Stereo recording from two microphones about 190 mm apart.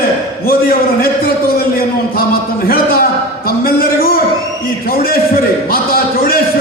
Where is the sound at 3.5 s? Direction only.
50° left (ahead or behind).